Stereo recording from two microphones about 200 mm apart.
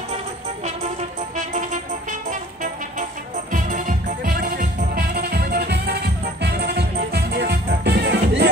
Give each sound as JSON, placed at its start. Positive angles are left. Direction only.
{"t": 1.3, "sound": "music", "side_deg": -40}